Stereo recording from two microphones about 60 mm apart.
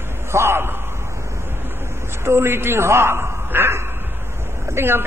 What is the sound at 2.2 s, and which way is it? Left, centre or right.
A man's voice, right.